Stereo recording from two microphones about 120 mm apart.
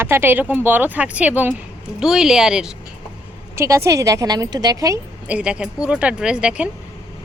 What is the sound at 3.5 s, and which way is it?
A woman's voice, 25° right (ahead or behind).